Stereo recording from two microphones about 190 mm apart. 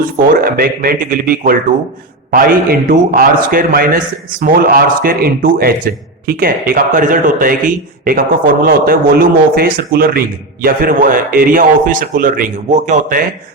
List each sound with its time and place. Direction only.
0.2 s a man's voice: 50° right (ahead or behind)